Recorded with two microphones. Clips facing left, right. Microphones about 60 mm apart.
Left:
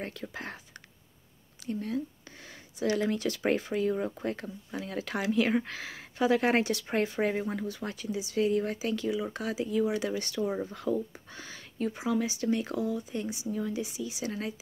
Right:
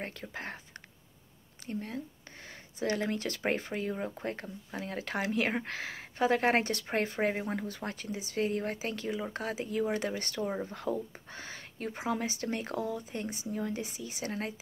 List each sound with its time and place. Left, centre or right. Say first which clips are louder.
0.0 s speech: left 2 dB; right
1.7 s speech: left 5 dB; right